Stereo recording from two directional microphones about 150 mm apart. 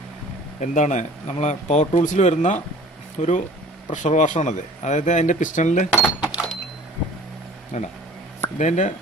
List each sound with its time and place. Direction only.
0.6 s speech: 55° left (ahead or behind)
6.1 s a sound: 5° right (ahead or behind)
7.7 s speech: 50° left (ahead or behind)